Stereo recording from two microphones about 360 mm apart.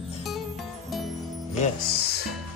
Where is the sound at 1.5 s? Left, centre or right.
Left.